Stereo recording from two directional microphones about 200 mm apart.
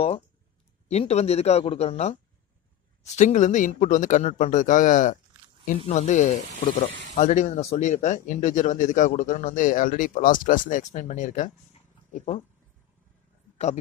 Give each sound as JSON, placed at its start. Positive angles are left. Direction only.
{"t": 0.8, "sound": "speech", "side_deg": 30}
{"t": 3.2, "sound": "speech", "side_deg": 40}